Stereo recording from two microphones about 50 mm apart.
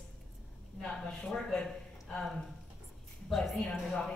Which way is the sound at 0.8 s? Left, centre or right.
Centre.